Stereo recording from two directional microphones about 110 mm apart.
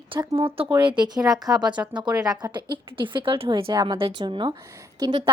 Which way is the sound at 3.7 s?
40° right (ahead or behind).